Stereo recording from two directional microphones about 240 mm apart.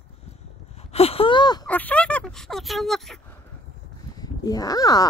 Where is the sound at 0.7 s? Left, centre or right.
Left.